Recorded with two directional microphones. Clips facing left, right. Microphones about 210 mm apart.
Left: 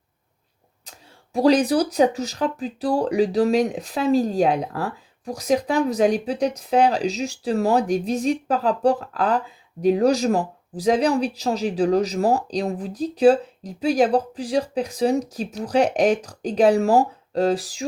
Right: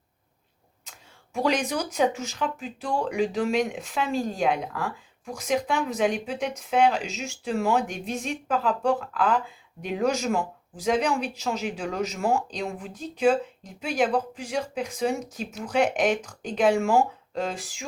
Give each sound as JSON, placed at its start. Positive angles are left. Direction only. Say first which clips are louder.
{"t": 0.9, "sound": "speech", "louder": "left 4 dB", "side_deg": 35}